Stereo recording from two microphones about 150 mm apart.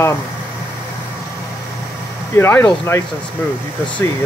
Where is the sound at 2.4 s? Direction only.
15° left (ahead or behind).